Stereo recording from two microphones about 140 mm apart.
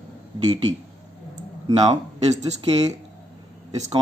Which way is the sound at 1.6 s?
25° right (ahead or behind).